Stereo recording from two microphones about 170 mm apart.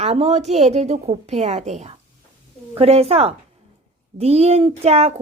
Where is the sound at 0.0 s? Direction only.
40° right (ahead or behind).